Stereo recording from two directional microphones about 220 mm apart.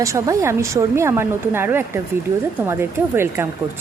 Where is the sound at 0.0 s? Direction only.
15° right (ahead or behind).